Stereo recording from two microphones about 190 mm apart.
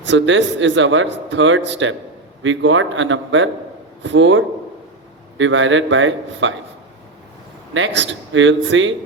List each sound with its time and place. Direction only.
0.0 s a man's voice: 75° right (ahead or behind)
7.7 s a man's voice: 80° right